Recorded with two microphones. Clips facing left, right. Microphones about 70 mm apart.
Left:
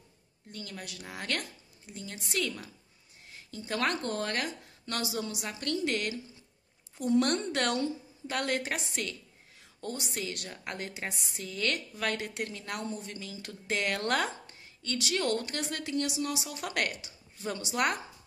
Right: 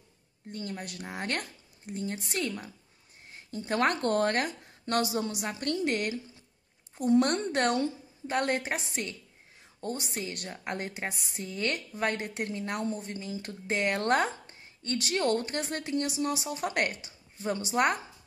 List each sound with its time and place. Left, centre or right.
0.5 s a woman's voice: right
3.3 s a woman's voice: right
4.0 s speech: right
4.3 s a woman's voice: right
7.2 s a woman's voice: right